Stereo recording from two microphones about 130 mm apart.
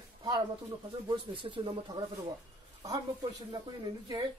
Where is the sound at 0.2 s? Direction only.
35° right (ahead or behind).